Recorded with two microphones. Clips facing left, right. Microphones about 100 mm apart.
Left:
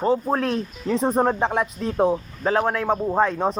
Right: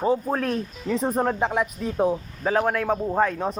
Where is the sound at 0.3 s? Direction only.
20° left (ahead or behind).